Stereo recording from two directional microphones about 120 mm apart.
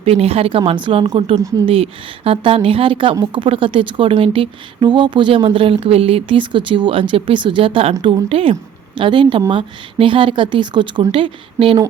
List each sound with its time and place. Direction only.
0.0 s a woman's voice: 55° right (ahead or behind)